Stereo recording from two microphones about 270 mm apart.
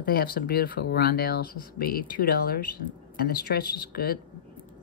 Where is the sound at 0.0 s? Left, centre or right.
Left.